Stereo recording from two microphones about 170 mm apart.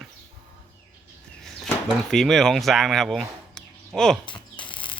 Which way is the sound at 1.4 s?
Centre (ahead or behind).